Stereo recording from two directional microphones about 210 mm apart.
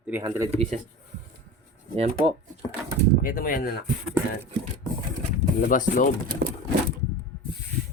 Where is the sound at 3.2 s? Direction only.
40° left (ahead or behind).